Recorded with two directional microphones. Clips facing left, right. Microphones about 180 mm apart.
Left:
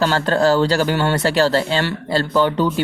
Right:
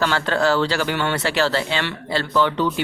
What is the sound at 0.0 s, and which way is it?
Speech, 35° left (ahead or behind).